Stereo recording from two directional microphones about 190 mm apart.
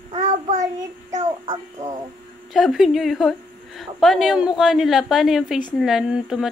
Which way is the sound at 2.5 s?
Centre (ahead or behind).